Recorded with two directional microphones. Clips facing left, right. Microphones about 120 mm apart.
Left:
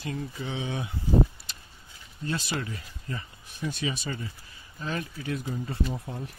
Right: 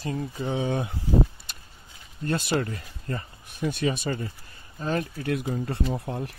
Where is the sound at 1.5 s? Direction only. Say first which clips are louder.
Right 1 dB; 55° right (ahead or behind).